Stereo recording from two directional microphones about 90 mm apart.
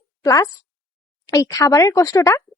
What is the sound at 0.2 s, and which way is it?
A woman's voice, 45° left (ahead or behind).